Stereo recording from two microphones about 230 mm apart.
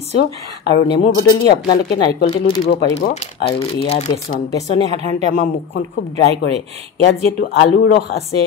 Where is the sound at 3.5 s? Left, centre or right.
Left.